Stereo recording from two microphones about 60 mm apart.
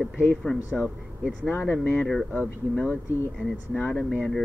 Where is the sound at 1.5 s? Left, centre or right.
Left.